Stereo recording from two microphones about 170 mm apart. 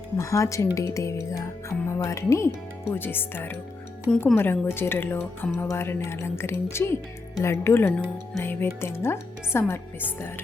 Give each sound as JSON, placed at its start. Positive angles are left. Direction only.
{"t": 0.2, "sound": "speech", "side_deg": 20}